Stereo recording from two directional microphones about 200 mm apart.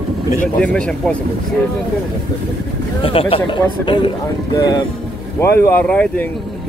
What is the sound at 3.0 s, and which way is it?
Speech, 25° left (ahead or behind).